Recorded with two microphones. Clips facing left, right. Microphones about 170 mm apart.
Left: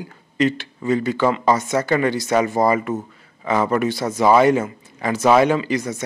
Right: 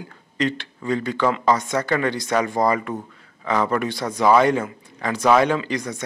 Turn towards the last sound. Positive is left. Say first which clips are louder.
# left 3 dB
turn(degrees=5)  # may be behind; listen again after turning